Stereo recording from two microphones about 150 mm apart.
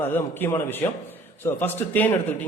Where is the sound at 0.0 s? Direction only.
15° left (ahead or behind).